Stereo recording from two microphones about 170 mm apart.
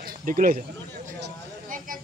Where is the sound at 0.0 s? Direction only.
55° right (ahead or behind).